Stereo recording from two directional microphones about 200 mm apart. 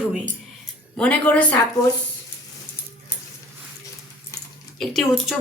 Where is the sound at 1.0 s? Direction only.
5° left (ahead or behind).